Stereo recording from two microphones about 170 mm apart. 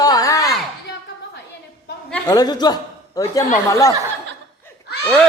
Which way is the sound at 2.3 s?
25° left (ahead or behind).